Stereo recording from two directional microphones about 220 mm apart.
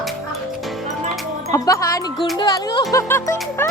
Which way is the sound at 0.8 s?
30° right (ahead or behind).